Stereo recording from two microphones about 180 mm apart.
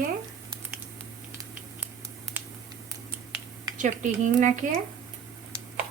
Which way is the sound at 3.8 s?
45° right (ahead or behind).